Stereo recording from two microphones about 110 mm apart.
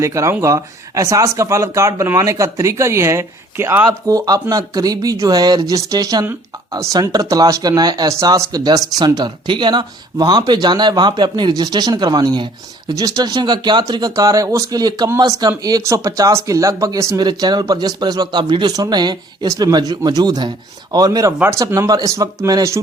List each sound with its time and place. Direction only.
0.0 s speech: 25° right (ahead or behind)
4.1 s speech: 35° right (ahead or behind)
17.2 s speech: 40° right (ahead or behind)